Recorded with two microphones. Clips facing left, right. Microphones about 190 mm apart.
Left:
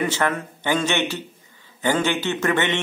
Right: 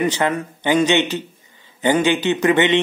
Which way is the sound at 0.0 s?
15° right (ahead or behind).